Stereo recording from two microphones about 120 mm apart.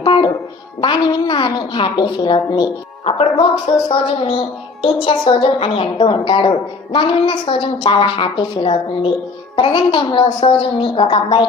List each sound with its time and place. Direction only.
0.0 s music: 45° left (ahead or behind)
0.8 s a woman's voice: 40° left (ahead or behind)